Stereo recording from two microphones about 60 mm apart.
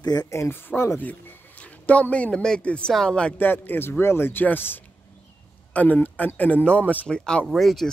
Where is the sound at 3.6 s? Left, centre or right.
Left.